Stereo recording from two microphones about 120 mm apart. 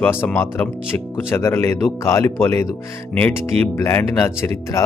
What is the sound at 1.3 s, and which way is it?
Speech, 20° left (ahead or behind).